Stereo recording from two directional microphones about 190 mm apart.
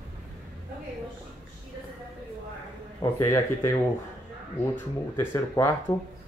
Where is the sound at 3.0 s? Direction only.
15° left (ahead or behind).